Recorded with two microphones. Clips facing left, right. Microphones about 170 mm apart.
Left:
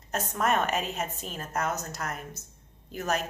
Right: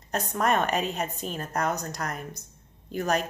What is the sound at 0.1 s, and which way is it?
A woman's voice, 5° left (ahead or behind).